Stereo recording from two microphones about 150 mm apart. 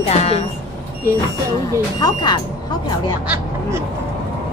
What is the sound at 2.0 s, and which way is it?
Speech, 30° left (ahead or behind).